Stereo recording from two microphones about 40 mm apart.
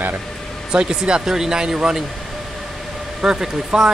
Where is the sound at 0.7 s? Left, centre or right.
Right.